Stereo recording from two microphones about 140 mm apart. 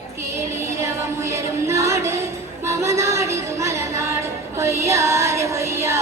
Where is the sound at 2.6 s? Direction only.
20° right (ahead or behind).